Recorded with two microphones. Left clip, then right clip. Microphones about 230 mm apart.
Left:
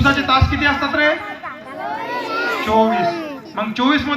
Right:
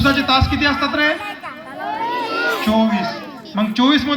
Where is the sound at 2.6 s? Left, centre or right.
Right.